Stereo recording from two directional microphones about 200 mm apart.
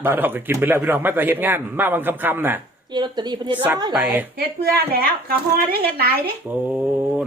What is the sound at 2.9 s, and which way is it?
A woman's voice, 20° right (ahead or behind).